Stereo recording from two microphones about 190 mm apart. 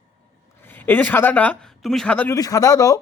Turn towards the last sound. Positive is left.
turn(degrees=20)  # may be behind; listen again after turning